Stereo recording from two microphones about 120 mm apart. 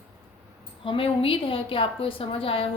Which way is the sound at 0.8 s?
50° left (ahead or behind).